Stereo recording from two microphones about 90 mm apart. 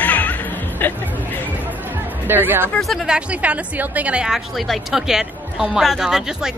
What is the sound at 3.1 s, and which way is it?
Speech, 15° right (ahead or behind).